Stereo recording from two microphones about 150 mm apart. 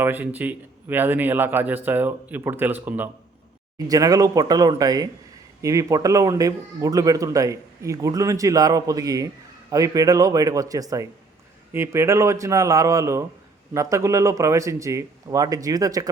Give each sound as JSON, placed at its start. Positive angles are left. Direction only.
{"t": 0.0, "sound": "speech", "side_deg": -10}
{"t": 3.8, "sound": "speech", "side_deg": -25}